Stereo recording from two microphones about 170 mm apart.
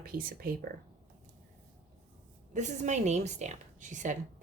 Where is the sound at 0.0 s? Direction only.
60° right (ahead or behind).